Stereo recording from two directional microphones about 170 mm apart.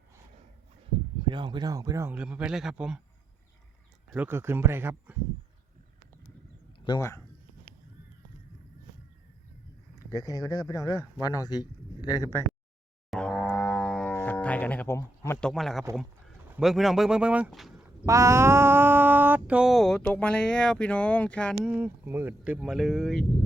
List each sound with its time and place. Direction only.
1.2 s a man's voice: 30° right (ahead or behind); by 3.0 s 5° right (ahead or behind)
4.1 s a man's voice: 10° right (ahead or behind)
6.8 s speech: 20° left (ahead or behind)
10.1 s speech: 20° left (ahead or behind)
13.1 s a sound: 5° left (ahead or behind)
14.3 s speech: 10° left (ahead or behind)
15.4 s mantra: 5° left (ahead or behind)
18.0 s mantra: 20° right (ahead or behind); by 21.7 s 5° left (ahead or behind)
21.7 s a man's voice: 10° right (ahead or behind)